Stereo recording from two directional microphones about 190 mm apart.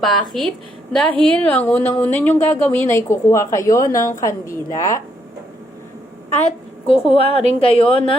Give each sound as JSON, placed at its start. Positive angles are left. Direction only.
{"t": 0.0, "sound": "a woman's voice", "side_deg": 0}
{"t": 6.4, "sound": "a woman's voice", "side_deg": 30}